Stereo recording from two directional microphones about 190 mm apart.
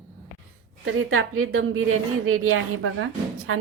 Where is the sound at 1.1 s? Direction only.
90° right.